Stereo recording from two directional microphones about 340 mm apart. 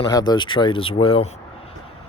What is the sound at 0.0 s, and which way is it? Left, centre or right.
Speech, centre.